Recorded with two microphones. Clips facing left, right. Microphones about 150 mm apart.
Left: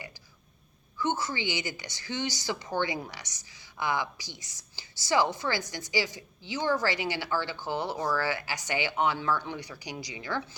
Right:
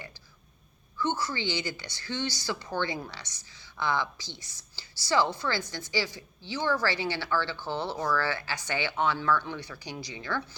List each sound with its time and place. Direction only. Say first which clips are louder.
0.9 s a woman's voice: even; 20° left (ahead or behind)